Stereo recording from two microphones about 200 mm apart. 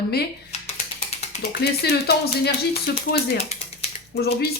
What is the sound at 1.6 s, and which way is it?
Speech, 55° left (ahead or behind).